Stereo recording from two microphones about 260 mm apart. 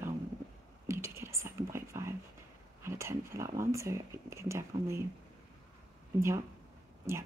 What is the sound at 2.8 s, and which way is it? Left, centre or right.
Speech, centre.